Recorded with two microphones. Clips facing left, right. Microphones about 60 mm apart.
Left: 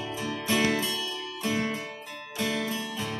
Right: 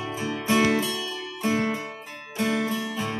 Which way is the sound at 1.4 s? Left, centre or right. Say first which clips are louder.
Right 4 dB; right.